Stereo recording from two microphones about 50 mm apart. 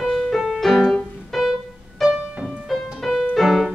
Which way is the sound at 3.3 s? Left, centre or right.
Centre.